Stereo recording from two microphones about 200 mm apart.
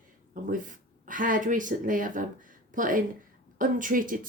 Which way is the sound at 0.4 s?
40° right (ahead or behind).